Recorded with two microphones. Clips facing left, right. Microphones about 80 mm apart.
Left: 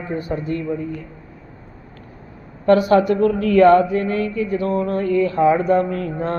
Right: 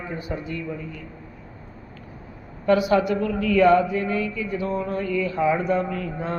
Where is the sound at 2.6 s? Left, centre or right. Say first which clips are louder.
Left 5 dB; left.